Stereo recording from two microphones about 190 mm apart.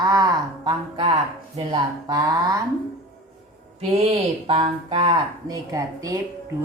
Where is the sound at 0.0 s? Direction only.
20° right (ahead or behind).